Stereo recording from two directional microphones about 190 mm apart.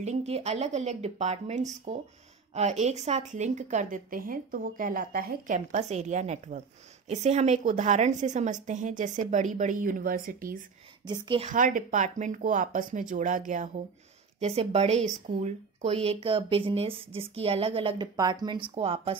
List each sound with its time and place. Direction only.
0.0 s a woman's voice: 35° right (ahead or behind)
11.1 s speech: 25° right (ahead or behind)
11.4 s speech: 45° right (ahead or behind)
14.4 s a woman's voice: 30° right (ahead or behind)